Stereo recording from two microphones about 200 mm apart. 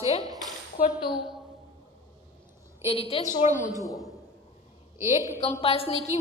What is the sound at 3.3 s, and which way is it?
Speech, 40° left (ahead or behind).